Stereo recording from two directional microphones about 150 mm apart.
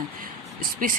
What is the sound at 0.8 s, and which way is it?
Speech, 65° right (ahead or behind).